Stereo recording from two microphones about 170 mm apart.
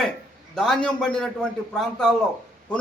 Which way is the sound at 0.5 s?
5° left (ahead or behind).